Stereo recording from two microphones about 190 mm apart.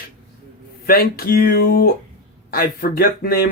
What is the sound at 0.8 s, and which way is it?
Speech, 50° left (ahead or behind).